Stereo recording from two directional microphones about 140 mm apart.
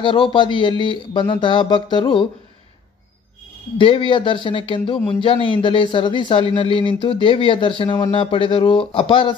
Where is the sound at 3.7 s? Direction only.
35° left (ahead or behind).